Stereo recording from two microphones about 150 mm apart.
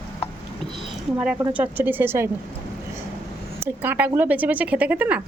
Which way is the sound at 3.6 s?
15° right (ahead or behind).